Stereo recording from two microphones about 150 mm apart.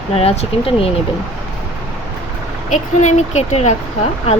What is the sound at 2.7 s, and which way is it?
Speech, 50° left (ahead or behind).